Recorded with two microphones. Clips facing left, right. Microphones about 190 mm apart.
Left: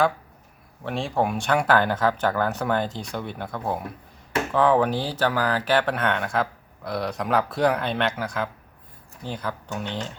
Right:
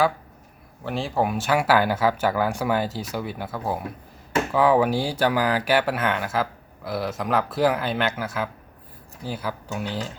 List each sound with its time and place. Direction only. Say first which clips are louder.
0.9 s speech: even; centre (ahead or behind)